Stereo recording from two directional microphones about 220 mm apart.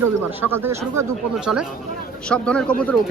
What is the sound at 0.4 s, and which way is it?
Speech, 10° right (ahead or behind).